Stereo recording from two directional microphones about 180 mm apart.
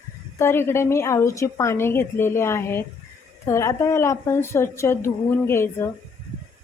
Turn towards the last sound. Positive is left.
turn(degrees=15)  # may be behind; listen again after turning